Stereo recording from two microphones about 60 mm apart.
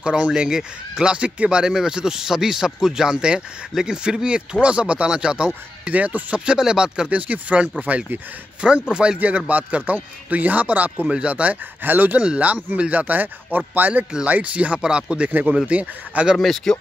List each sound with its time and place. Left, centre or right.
0.0 s speech: centre
7.1 s a man's voice: right
9.2 s a man's voice: right
11.8 s speech: right
12.2 s a man's voice: right
16.3 s speech: centre